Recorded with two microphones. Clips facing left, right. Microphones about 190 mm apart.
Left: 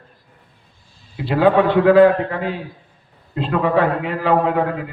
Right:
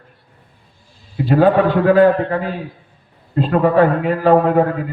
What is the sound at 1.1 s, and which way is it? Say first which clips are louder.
Speech: right 2 dB; 45° right (ahead or behind).